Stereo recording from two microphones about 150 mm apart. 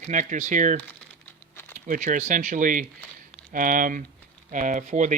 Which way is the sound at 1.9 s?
60° right (ahead or behind).